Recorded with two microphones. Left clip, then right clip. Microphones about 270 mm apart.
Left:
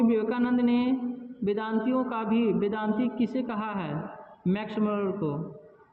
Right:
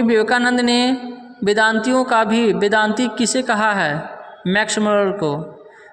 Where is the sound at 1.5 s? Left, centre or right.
Right.